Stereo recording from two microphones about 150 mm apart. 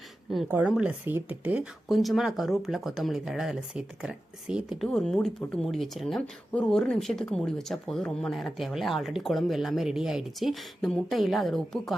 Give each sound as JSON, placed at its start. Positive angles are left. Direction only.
{"t": 0.4, "sound": "speech", "side_deg": -10}